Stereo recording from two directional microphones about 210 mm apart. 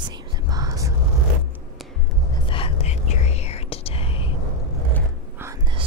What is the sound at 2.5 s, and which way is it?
Whispering, 25° left (ahead or behind).